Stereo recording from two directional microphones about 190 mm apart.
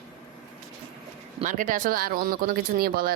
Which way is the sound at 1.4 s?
45° right (ahead or behind).